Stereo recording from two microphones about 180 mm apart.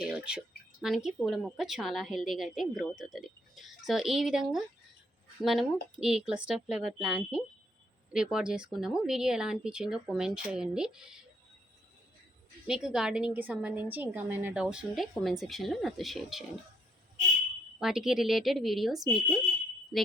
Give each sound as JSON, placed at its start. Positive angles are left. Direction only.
{"t": 0.0, "sound": "speech", "side_deg": -5}
{"t": 12.6, "sound": "speech", "side_deg": -5}
{"t": 17.7, "sound": "speech", "side_deg": -5}